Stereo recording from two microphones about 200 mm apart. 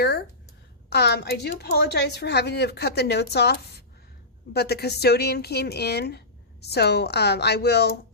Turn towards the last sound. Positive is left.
turn(degrees=55)  # may be behind; listen again after turning